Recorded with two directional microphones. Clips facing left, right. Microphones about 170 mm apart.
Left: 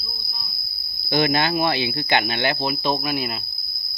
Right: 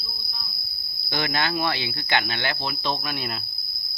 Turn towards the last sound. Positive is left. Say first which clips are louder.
# left 5 dB
turn(degrees=10)  # may be behind; listen again after turning